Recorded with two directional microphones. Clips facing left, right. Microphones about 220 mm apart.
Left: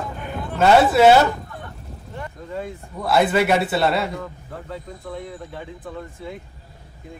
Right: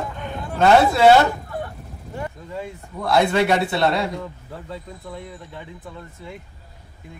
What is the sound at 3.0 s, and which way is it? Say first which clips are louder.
A man's voice: even; 5° left (ahead or behind).